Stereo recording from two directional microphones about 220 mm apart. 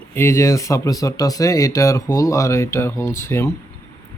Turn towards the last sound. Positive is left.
turn(degrees=10)  # may be behind; listen again after turning